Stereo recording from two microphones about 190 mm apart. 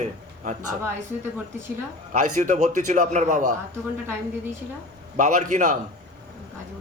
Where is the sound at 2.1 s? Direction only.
40° right (ahead or behind).